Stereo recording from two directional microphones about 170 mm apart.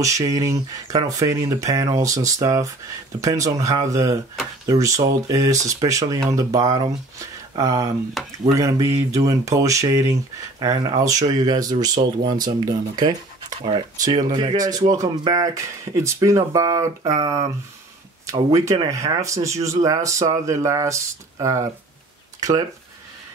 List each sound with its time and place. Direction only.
0.0 s speech: 20° right (ahead or behind)